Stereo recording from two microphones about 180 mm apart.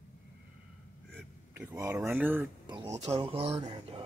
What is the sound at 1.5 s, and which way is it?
Speech, 15° right (ahead or behind).